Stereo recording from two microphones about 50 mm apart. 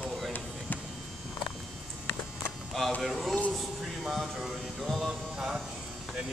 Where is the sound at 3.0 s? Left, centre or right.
Centre.